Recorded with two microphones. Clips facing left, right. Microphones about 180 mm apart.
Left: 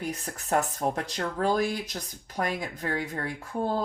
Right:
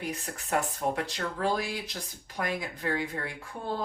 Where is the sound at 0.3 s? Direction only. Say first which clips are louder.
Left 4 dB; 45° left (ahead or behind).